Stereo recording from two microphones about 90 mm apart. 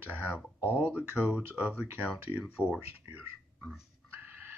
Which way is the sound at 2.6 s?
10° left (ahead or behind).